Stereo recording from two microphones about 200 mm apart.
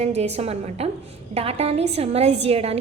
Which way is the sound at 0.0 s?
30° right (ahead or behind).